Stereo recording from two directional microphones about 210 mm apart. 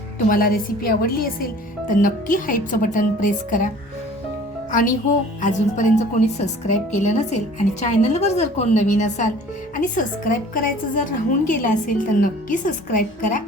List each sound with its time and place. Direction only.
0.3 s a woman's voice: 40° left (ahead or behind)
4.7 s a woman's voice: 40° left (ahead or behind)